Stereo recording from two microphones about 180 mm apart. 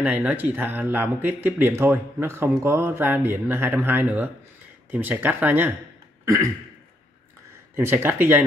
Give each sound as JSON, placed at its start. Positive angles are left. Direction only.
{"t": 0.0, "sound": "speech", "side_deg": -10}
{"t": 6.2, "sound": "throat clearing", "side_deg": -15}
{"t": 7.7, "sound": "speech", "side_deg": -15}